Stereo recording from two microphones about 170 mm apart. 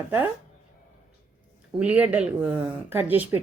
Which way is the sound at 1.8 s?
10° right (ahead or behind).